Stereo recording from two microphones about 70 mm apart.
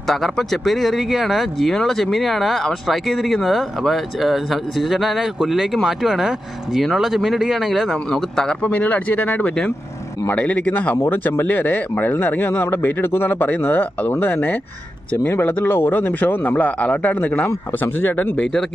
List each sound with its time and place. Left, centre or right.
0.0 s speech: centre
8.6 s speech: left
18.4 s speech: centre